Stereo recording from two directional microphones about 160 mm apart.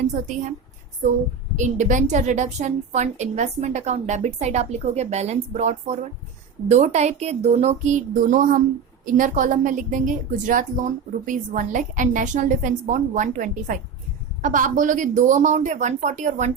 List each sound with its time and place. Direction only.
1.5 s a woman's voice: 50° right (ahead or behind)